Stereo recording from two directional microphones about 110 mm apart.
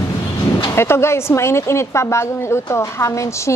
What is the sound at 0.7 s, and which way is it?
Speech, 25° left (ahead or behind).